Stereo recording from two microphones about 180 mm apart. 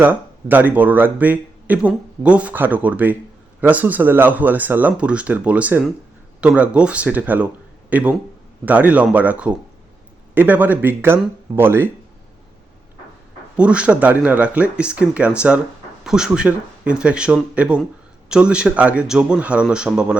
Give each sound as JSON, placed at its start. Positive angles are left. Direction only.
{"t": 0.0, "sound": "speech", "side_deg": -10}
{"t": 13.6, "sound": "a man's voice", "side_deg": -5}